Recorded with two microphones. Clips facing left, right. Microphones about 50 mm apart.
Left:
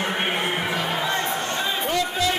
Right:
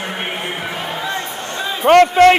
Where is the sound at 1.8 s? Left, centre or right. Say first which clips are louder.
Right 19 dB; right.